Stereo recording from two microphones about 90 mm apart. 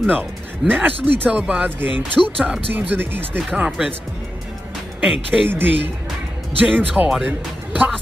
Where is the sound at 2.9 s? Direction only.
20° right (ahead or behind).